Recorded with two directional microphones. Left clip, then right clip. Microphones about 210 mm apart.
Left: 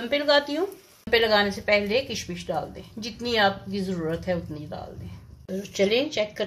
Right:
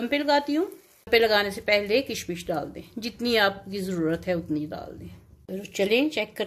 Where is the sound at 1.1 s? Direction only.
45° right (ahead or behind).